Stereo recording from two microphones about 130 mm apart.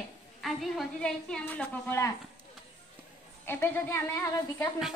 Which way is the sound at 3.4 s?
15° left (ahead or behind).